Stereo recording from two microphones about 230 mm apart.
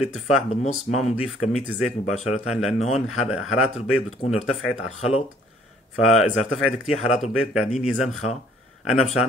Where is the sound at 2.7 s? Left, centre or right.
Left.